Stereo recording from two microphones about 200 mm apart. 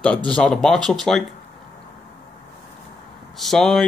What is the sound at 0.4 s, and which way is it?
Speech, 5° left (ahead or behind).